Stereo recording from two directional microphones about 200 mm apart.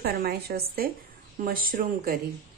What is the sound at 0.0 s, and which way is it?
A woman's voice, 50° right (ahead or behind).